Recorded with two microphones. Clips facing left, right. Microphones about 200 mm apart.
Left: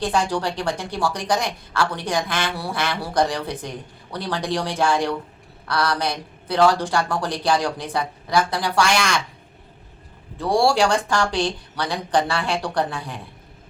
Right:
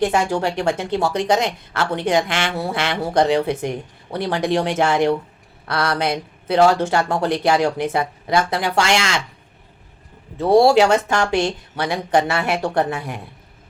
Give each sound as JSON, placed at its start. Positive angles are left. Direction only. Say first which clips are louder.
{"t": 0.0, "sound": "a woman's voice", "louder": "right 4 dB", "side_deg": -25}
{"t": 10.3, "sound": "a woman's voice", "louder": "right 6 dB", "side_deg": -20}